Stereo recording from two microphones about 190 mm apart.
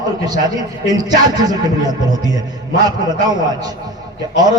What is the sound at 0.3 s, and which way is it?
A man's voice, 20° right (ahead or behind).